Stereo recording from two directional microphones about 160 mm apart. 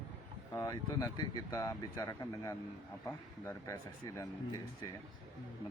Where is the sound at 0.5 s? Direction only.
20° left (ahead or behind).